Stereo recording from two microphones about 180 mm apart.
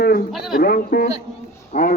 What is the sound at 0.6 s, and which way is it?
Speech, 55° left (ahead or behind).